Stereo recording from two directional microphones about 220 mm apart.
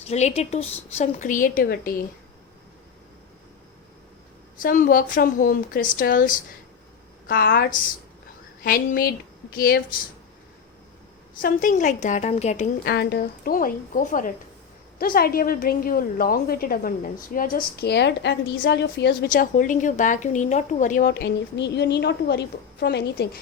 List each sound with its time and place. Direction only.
0.0 s a woman's voice: 30° left (ahead or behind)
4.6 s a woman's voice: 40° left (ahead or behind)
11.4 s a woman's voice: 35° left (ahead or behind)
12.8 s a woman's voice: 50° left (ahead or behind)